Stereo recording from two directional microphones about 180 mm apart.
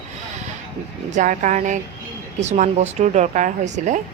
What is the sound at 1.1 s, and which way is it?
A woman's voice, 45° right (ahead or behind).